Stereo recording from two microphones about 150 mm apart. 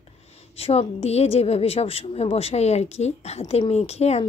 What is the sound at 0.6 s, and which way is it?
A woman's voice, 45° left (ahead or behind).